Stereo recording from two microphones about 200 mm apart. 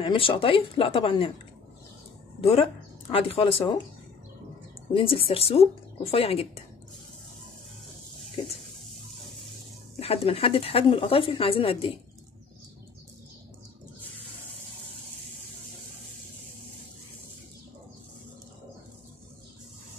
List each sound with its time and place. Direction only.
0.0 s speech: 25° left (ahead or behind)
2.4 s speech: 30° left (ahead or behind)
4.9 s speech: 25° left (ahead or behind)
9.9 s speech: 30° left (ahead or behind)